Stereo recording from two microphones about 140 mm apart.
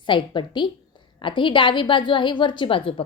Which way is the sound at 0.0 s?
35° left (ahead or behind).